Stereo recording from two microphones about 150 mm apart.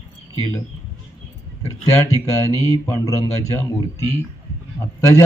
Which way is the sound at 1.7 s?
20° left (ahead or behind).